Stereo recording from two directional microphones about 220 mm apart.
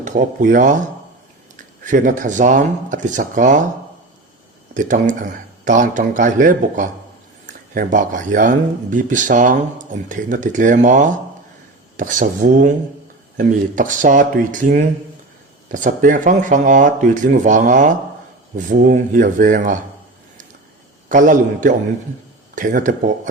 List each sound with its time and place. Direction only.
0.0 s speech: 35° right (ahead or behind)
1.8 s speech: 35° right (ahead or behind)
4.7 s speech: 35° right (ahead or behind)
21.1 s speech: 35° right (ahead or behind)